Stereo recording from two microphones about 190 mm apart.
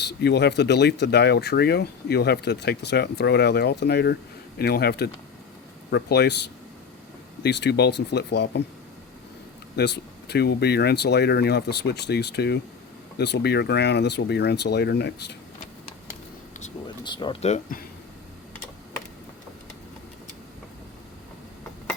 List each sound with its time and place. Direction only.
0.0 s speech: 60° left (ahead or behind)
7.4 s speech: 65° left (ahead or behind)
9.7 s speech: 60° left (ahead or behind)
16.8 s speech: 25° left (ahead or behind)
17.4 s speech: 45° left (ahead or behind)